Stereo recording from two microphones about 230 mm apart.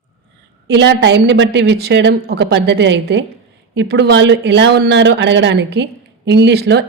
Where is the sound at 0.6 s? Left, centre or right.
Right.